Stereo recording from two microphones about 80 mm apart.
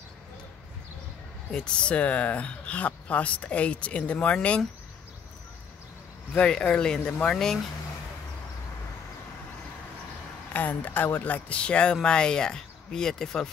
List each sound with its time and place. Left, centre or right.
1.5 s speech: centre
6.3 s speech: centre
10.5 s speech: left